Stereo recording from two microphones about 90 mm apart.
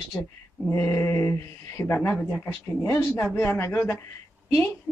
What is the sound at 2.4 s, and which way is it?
Speech, 30° left (ahead or behind).